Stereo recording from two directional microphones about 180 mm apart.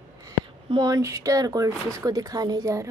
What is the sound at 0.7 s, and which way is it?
Speech, 25° right (ahead or behind).